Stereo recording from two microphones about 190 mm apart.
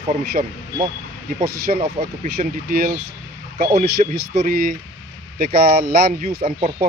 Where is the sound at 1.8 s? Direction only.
35° right (ahead or behind).